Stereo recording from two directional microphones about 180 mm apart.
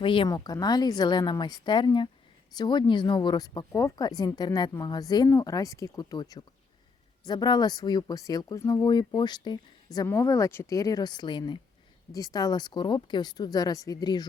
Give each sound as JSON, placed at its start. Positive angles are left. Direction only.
{"t": 0.0, "sound": "speech", "side_deg": 30}